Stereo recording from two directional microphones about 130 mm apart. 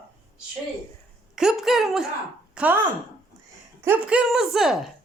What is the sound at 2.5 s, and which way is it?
Chopping, 10° right (ahead or behind).